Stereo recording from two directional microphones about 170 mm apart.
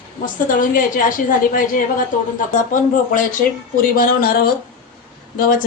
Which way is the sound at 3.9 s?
60° left (ahead or behind).